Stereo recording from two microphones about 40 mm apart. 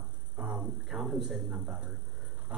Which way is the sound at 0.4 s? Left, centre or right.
Centre.